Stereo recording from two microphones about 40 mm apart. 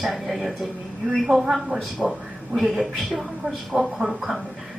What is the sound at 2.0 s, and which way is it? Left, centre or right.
Speech, right.